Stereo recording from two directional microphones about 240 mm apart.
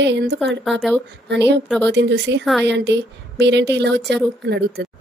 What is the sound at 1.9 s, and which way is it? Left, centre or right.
A woman's voice, right.